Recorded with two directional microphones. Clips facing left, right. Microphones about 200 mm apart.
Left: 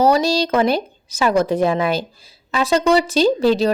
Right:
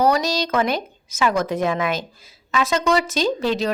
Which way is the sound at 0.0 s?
30° left (ahead or behind).